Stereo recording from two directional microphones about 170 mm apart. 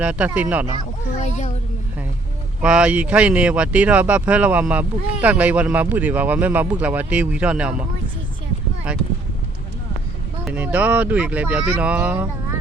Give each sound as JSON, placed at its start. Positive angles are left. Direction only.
{"t": 0.0, "sound": "speech", "side_deg": -10}
{"t": 1.2, "sound": "a child's voice", "side_deg": 45}
{"t": 2.6, "sound": "speech", "side_deg": -5}
{"t": 10.4, "sound": "speech", "side_deg": -5}